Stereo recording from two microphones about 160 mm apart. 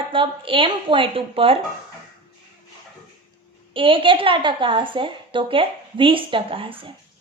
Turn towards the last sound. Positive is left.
turn(degrees=-35)  # may be behind; listen again after turning